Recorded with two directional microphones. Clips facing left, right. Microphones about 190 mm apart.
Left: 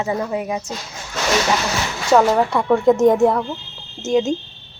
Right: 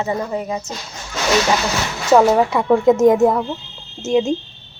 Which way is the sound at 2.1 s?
5° right (ahead or behind).